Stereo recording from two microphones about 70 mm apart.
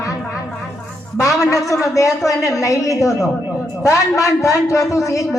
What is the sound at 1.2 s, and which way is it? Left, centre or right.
A man's voice, left.